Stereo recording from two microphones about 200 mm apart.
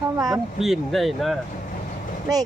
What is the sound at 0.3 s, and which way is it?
Speech, centre (ahead or behind).